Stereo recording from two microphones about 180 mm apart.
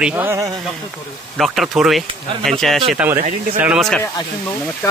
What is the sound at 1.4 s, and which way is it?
Speech, centre (ahead or behind).